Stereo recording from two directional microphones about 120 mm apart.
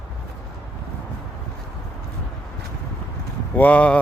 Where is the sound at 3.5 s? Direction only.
10° left (ahead or behind).